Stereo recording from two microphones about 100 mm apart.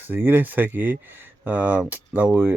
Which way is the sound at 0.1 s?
20° right (ahead or behind).